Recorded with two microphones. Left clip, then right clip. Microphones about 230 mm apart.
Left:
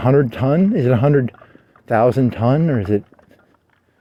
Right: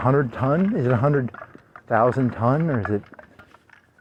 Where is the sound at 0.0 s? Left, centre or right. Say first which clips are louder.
Left 5 dB; left.